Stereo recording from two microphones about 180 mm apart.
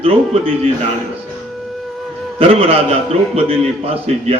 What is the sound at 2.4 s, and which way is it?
Speech, 35° right (ahead or behind).